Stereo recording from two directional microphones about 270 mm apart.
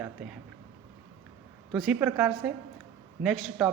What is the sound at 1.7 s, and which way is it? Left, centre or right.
Speech, centre.